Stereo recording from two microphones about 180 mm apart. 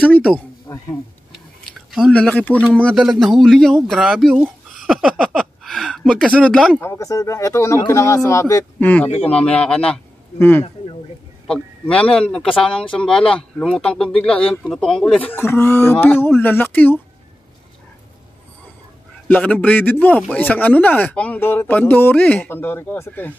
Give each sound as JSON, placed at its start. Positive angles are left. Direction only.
{"t": 0.1, "sound": "a man's voice", "side_deg": -5}
{"t": 0.7, "sound": "a sound", "side_deg": 25}
{"t": 1.9, "sound": "a man's voice", "side_deg": 0}
{"t": 11.4, "sound": "a man's voice", "side_deg": 5}
{"t": 19.2, "sound": "a man's voice", "side_deg": 10}